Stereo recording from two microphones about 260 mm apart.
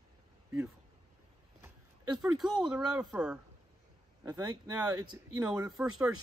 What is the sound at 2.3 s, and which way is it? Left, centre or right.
Speech, centre.